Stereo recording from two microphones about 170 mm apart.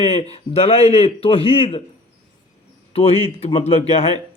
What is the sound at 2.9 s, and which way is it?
Speech, 35° left (ahead or behind).